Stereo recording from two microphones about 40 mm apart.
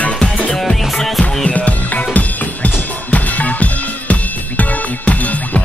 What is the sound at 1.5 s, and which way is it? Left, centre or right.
Music, left.